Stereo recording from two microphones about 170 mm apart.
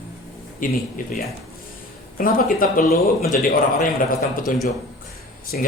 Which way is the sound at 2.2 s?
55° left (ahead or behind).